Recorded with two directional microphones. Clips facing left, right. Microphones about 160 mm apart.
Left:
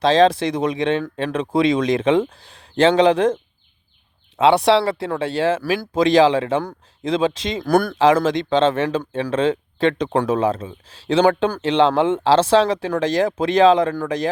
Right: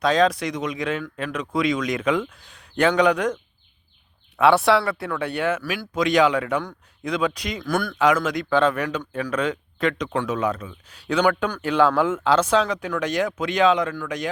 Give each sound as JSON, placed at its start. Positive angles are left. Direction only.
{"t": 0.0, "sound": "speech", "side_deg": 25}
{"t": 4.4, "sound": "speech", "side_deg": 20}
{"t": 7.7, "sound": "speech", "side_deg": 40}